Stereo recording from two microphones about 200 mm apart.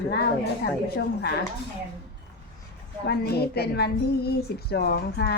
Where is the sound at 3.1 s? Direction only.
50° left (ahead or behind).